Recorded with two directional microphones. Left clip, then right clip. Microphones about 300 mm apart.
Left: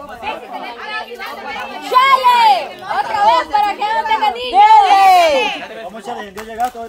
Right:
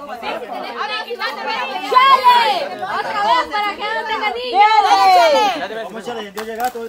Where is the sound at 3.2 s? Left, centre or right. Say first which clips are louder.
Left 4 dB; left.